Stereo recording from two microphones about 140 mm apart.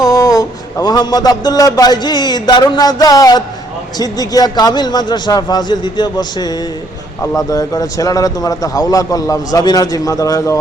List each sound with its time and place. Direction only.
0.0 s a man's voice: 25° left (ahead or behind)